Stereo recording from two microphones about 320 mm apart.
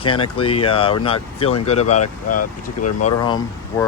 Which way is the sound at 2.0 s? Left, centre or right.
Left.